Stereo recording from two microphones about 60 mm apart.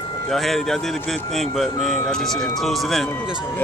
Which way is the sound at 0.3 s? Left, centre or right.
Centre.